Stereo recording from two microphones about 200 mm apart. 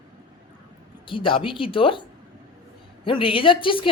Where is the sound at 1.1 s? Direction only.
25° left (ahead or behind).